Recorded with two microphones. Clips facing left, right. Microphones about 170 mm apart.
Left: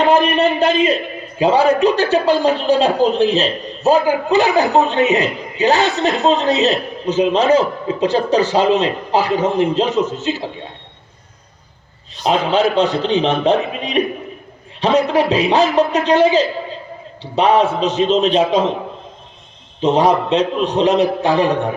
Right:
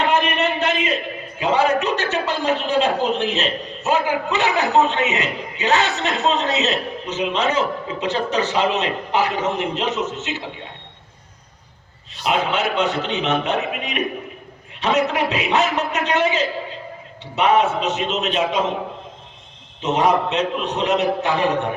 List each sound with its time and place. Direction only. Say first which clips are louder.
0.0 s a sound: left 6 dB; 35° left (ahead or behind)
1.4 s a man's voice: left 6 dB; 35° left (ahead or behind)
12.2 s a man's voice: left 6 dB; 35° left (ahead or behind)
19.8 s a man's voice: left 4 dB; 30° left (ahead or behind)